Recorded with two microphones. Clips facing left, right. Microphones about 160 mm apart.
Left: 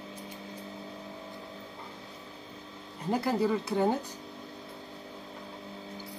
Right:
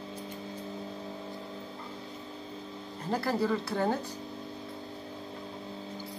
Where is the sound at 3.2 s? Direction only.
15° left (ahead or behind).